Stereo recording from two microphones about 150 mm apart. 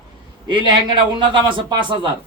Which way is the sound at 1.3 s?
30° right (ahead or behind).